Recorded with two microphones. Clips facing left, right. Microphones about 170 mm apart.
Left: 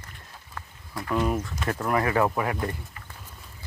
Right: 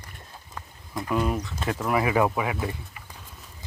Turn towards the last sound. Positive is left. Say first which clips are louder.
# even
turn(degrees=-5)  # may be behind; listen again after turning